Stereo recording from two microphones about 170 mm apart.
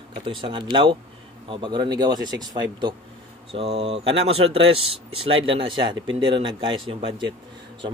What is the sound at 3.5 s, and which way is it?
Speech, 40° right (ahead or behind).